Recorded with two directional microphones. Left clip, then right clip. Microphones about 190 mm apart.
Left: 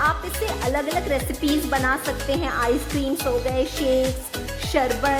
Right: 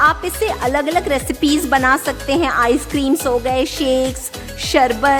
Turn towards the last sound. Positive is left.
turn(degrees=-45)  # may be behind; listen again after turning